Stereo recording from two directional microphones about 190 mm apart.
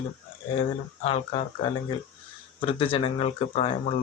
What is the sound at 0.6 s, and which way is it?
Speech, 30° left (ahead or behind).